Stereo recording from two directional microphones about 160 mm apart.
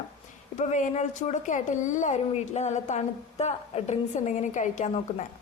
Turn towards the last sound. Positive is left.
turn(degrees=45)  # may be behind; listen again after turning